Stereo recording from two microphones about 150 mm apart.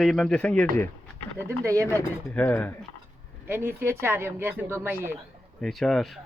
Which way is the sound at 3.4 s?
15° right (ahead or behind).